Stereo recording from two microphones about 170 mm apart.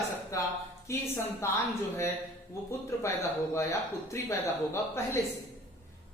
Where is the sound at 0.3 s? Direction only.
20° left (ahead or behind).